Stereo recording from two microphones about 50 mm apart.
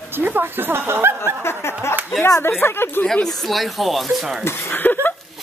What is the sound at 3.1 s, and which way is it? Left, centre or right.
Speech, centre.